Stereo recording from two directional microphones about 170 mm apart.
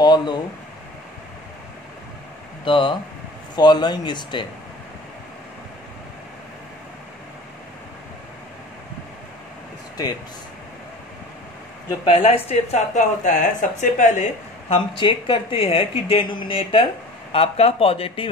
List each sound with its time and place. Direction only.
0.0 s speech: 25° left (ahead or behind)
2.6 s speech: 30° left (ahead or behind)
11.9 s speech: 35° left (ahead or behind)
15.0 s speech: 30° left (ahead or behind)